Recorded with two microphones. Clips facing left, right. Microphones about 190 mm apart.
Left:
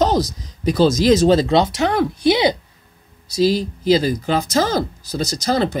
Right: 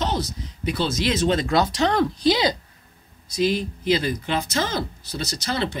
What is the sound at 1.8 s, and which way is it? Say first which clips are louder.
Speech: left 2 dB; 5° left (ahead or behind).